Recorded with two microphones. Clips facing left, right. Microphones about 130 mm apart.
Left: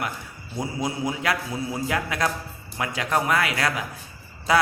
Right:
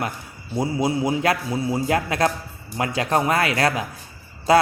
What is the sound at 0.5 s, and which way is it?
Speech, 30° right (ahead or behind).